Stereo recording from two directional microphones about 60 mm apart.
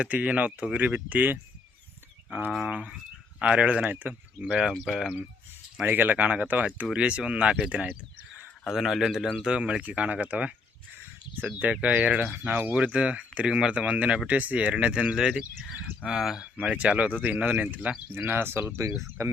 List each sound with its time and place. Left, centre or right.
0.0 s speech: right
2.6 s speech: centre
3.8 s speech: right
4.4 s speech: centre
4.9 s speech: centre
5.8 s speech: right
8.6 s speech: centre
9.4 s speech: centre
11.6 s speech: right; by 16.4 s centre
16.6 s speech: right
18.8 s speech: right